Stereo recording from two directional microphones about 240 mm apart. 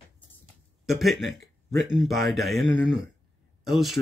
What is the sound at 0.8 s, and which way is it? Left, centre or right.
Speech, centre.